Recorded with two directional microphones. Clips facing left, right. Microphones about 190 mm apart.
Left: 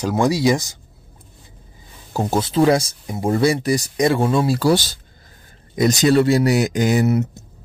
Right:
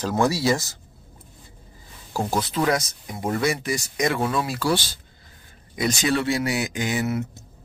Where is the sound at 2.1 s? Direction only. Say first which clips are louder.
Left 6 dB; 25° left (ahead or behind); by 7.3 s 40° left (ahead or behind).